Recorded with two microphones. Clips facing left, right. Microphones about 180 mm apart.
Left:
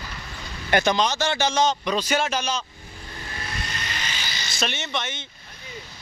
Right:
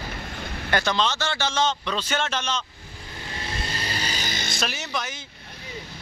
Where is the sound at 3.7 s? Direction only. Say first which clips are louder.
Right 3 dB; 35° right (ahead or behind); by 4.6 s 50° right (ahead or behind).